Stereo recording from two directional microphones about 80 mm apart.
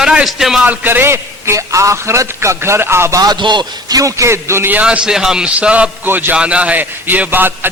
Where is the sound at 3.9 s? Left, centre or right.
Right.